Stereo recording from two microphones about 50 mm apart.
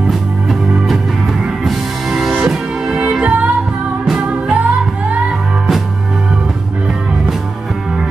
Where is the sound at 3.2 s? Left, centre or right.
Right.